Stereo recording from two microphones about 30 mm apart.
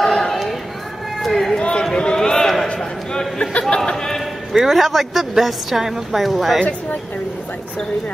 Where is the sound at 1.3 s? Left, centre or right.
Centre.